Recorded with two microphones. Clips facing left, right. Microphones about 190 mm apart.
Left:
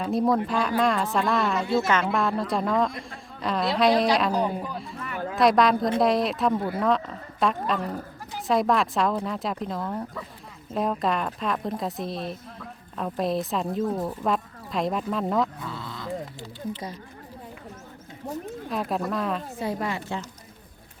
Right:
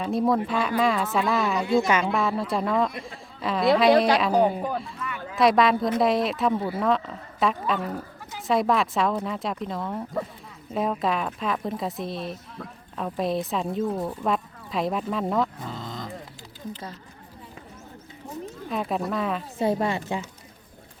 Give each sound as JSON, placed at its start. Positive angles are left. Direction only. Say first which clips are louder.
{"t": 0.0, "sound": "a woman's voice", "louder": "even", "side_deg": 0}
{"t": 4.3, "sound": "speech", "louder": "right 4 dB", "side_deg": -55}
{"t": 4.9, "sound": "a sound", "louder": "left 3 dB", "side_deg": 55}
{"t": 5.4, "sound": "a woman's voice", "louder": "even", "side_deg": 0}
{"t": 15.6, "sound": "livestock", "louder": "right 1 dB", "side_deg": -45}
{"t": 18.7, "sound": "a woman's voice", "louder": "right 1 dB", "side_deg": 0}
{"t": 19.5, "sound": "a woman's voice", "louder": "right 5 dB", "side_deg": -25}